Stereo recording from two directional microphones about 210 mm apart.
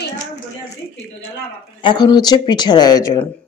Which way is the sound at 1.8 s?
20° left (ahead or behind).